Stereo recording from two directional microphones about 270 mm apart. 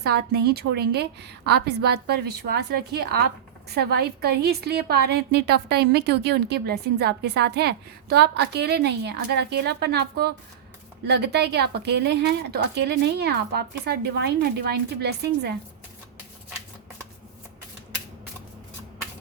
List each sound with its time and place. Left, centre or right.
0.0 s a woman's voice: right